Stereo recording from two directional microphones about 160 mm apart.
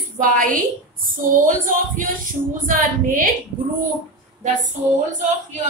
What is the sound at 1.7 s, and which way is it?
Speech, 55° right (ahead or behind).